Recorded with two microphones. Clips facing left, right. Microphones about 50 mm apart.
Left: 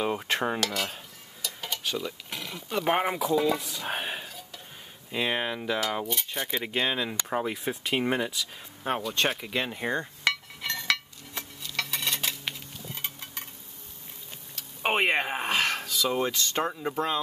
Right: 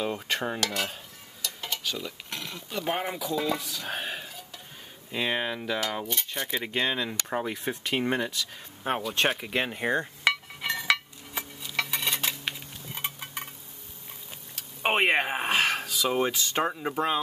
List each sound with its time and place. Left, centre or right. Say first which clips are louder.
0.0 s cutlery: left 2 dB; centre
0.7 s speech: even; centre
1.4 s dishes: even; centre
2.0 s speech: left 2 dB; centre
2.7 s speech: left 4 dB; left
3.3 s speech: left 3 dB; centre
3.6 s speech: left 1 dB; centre
5.1 s speech: even; centre
8.8 s cutlery: right 1 dB; centre
12.9 s stir: right 5 dB; centre
14.5 s speech: right 1 dB; centre